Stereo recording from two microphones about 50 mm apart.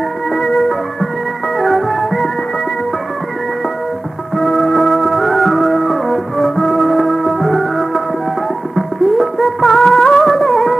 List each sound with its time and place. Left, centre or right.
0.3 s music: centre
4.4 s music: centre